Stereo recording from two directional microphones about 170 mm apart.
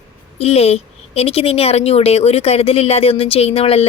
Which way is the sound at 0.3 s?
35° left (ahead or behind).